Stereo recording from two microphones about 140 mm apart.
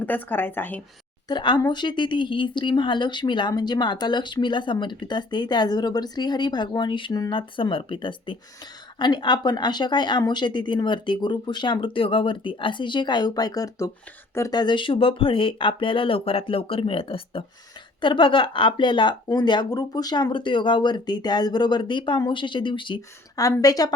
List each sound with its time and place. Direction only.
0.0 s a woman's voice: 15° left (ahead or behind)
1.3 s a woman's voice: 30° left (ahead or behind)